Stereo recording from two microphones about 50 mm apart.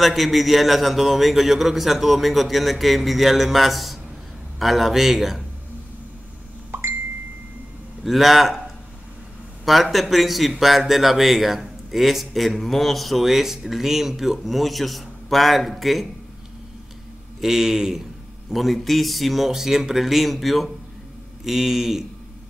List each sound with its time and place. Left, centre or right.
0.0 s speech: centre
8.0 s speech: centre
9.7 s speech: centre
17.4 s a man's voice: centre